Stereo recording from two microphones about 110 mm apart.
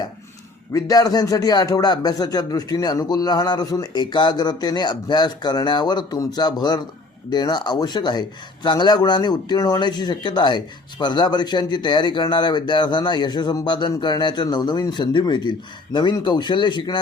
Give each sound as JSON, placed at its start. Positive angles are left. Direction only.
{"t": 0.7, "sound": "a man's voice", "side_deg": 35}